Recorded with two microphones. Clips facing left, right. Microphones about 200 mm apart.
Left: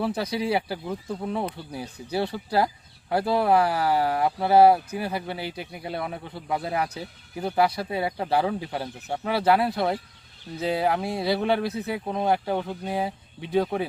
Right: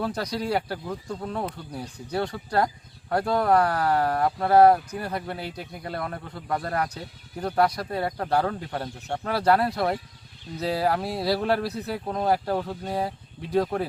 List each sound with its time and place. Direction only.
0.0 s speech: 5° left (ahead or behind)